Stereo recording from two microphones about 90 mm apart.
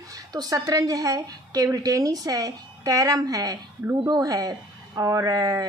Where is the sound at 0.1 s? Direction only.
45° right (ahead or behind).